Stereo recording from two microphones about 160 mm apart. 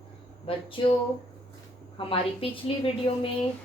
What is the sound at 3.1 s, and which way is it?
Speech, 30° left (ahead or behind).